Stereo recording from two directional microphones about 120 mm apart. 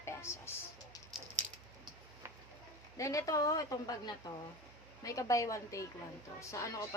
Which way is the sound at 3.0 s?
30° left (ahead or behind).